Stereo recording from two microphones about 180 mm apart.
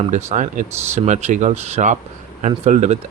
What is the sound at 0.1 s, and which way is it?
Speech, 40° right (ahead or behind).